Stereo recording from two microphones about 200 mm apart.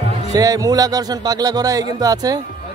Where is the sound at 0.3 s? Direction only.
15° right (ahead or behind).